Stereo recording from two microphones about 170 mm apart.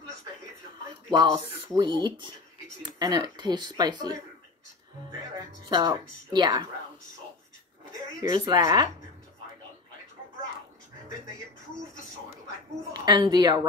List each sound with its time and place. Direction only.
1.1 s speech: 25° right (ahead or behind)
5.7 s speech: 25° right (ahead or behind)
8.2 s speech: 20° right (ahead or behind)
12.9 s speech: 25° right (ahead or behind)